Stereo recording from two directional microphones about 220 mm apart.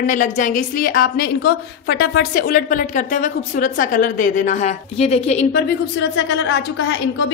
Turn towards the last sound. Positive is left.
turn(degrees=55)  # may be behind; listen again after turning